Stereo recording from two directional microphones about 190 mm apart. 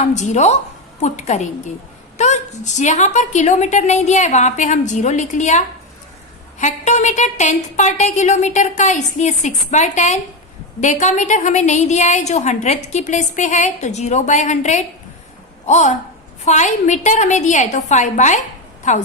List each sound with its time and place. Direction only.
0.0 s a woman's voice: 40° left (ahead or behind)